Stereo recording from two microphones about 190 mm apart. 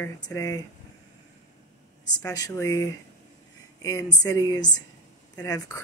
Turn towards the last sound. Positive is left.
turn(degrees=20)  # may be behind; listen again after turning